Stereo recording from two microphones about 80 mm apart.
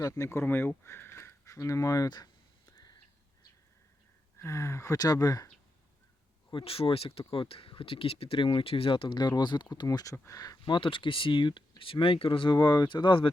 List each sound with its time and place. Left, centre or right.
0.0 s speech: left
4.4 s speech: left
4.9 s speech: left
6.5 s speech: left
9.8 s speech: left
10.7 s speech: left